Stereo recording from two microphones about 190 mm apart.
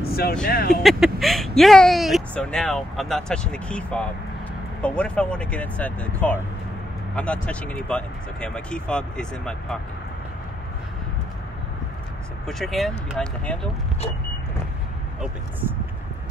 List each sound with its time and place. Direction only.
0.1 s speech: 55° left (ahead or behind)
0.8 s speech: centre (ahead or behind)
12.4 s speech: centre (ahead or behind)